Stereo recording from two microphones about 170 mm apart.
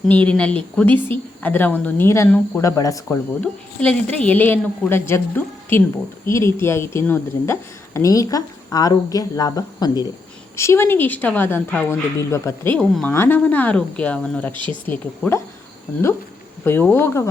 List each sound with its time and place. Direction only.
0.1 s a woman's voice: 10° left (ahead or behind)
3.4 s a woman's voice: 5° left (ahead or behind)
12.9 s a woman's voice: 5° left (ahead or behind)
14.5 s speech: 30° right (ahead or behind)
16.6 s a woman's voice: 10° left (ahead or behind)